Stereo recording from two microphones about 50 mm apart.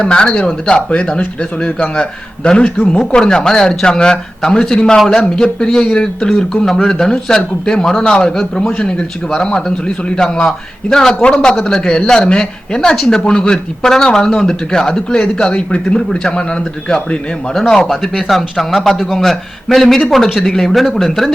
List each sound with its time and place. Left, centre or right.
0.0 s a man's voice: centre
1.2 s a man's voice: left
1.8 s a man's voice: centre
17.5 s a man's voice: centre